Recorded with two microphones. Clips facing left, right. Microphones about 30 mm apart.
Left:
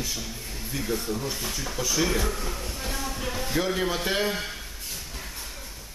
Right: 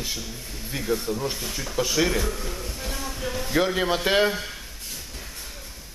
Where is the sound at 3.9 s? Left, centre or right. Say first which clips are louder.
Right 5 dB; right.